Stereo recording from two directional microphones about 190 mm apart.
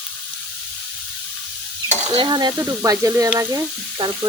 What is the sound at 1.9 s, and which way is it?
Frying, 25° right (ahead or behind).